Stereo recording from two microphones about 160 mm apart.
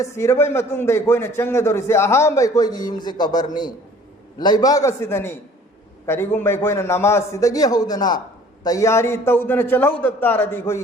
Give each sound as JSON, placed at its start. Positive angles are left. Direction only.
{"t": 0.0, "sound": "a man's voice", "side_deg": 15}